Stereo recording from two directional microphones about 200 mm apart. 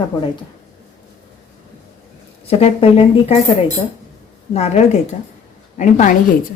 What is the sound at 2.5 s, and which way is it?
Speech, 30° left (ahead or behind).